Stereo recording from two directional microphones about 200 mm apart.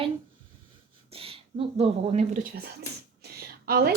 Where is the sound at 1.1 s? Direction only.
30° right (ahead or behind).